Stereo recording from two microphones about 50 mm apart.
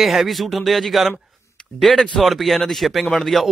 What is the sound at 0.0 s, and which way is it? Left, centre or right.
Speech, centre.